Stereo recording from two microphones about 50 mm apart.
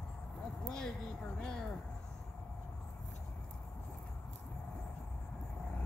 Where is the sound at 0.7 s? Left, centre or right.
Centre.